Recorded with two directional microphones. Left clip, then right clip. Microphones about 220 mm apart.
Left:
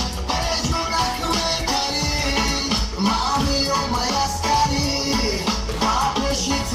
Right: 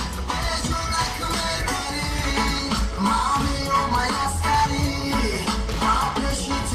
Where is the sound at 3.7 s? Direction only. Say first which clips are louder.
Even; 5° left (ahead or behind).